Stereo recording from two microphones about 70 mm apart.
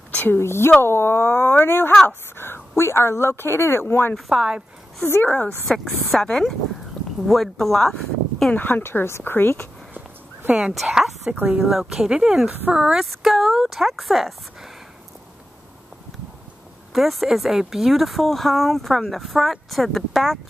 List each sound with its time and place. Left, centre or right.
0.1 s a sound: left
0.4 s a woman's voice: left
4.3 s speech: centre
5.0 s a woman's voice: left
5.7 s speech: centre
8.5 s a woman's voice: left
10.5 s speech: centre
11.3 s speech: centre
11.6 s speech: centre
13.0 s speech: centre
16.9 s speech: centre